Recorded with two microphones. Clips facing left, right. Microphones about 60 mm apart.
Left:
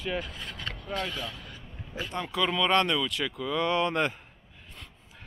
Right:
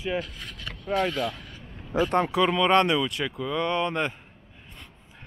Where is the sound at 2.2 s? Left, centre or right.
Right.